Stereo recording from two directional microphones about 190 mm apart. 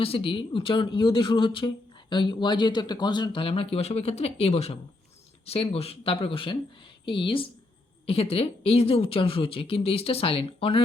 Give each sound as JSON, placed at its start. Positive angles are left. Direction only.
{"t": 0.0, "sound": "speech", "side_deg": 30}